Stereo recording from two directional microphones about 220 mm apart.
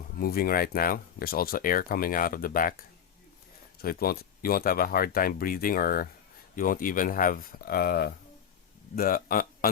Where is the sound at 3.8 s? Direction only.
45° left (ahead or behind).